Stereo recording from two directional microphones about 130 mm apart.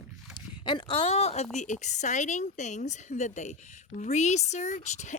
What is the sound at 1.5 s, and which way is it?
Speech, 65° left (ahead or behind).